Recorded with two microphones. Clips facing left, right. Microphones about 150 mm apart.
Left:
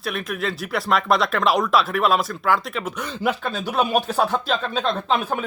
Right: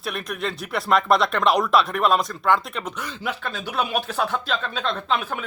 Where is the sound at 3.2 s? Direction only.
45° left (ahead or behind).